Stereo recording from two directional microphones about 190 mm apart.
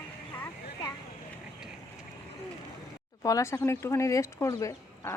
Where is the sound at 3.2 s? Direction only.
15° left (ahead or behind).